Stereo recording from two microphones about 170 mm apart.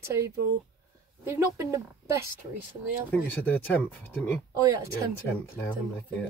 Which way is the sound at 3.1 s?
10° left (ahead or behind).